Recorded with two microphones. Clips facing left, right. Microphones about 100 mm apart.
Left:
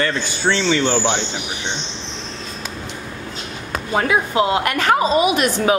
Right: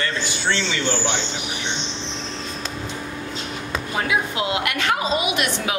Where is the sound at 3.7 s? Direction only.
45° left (ahead or behind).